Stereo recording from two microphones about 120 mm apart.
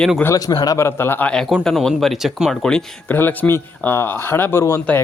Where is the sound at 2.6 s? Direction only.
5° left (ahead or behind).